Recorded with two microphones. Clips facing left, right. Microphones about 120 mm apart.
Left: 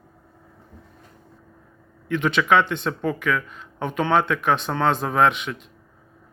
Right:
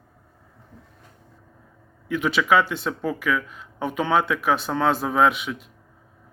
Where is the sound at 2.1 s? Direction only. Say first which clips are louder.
Left 1 dB; 5° right (ahead or behind).